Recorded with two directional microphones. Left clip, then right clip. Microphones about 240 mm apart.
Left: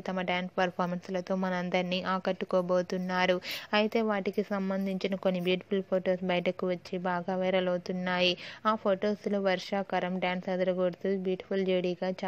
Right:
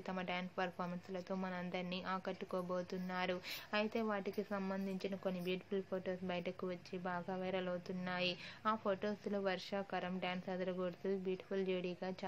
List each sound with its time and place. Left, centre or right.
0.1 s a woman's voice: left